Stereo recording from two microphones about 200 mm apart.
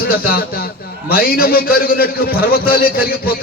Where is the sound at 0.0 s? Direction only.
50° left (ahead or behind).